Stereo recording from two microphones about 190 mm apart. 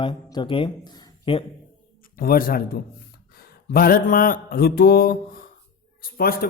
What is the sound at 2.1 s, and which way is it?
Speech, 50° left (ahead or behind).